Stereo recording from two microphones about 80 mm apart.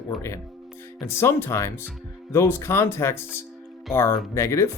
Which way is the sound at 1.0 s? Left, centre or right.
Left.